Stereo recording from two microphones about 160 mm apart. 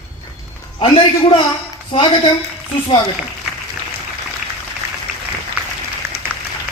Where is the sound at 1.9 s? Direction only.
35° left (ahead or behind).